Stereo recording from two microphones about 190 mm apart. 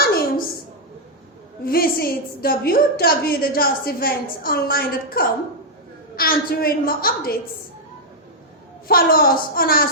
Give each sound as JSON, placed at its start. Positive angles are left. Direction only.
{"t": 0.0, "sound": "a sound", "side_deg": 55}
{"t": 1.6, "sound": "a woman's voice", "side_deg": 50}
{"t": 8.9, "sound": "a woman's voice", "side_deg": 50}